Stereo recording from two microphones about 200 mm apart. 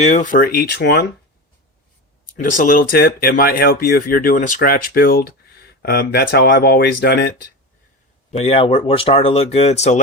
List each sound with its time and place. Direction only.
0.0 s speech: 35° left (ahead or behind); by 1.0 s 55° left (ahead or behind)
2.4 s speech: 40° left (ahead or behind)
8.3 s speech: 30° left (ahead or behind)